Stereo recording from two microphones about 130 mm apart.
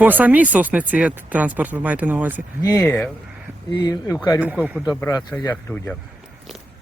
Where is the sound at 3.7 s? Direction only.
30° left (ahead or behind).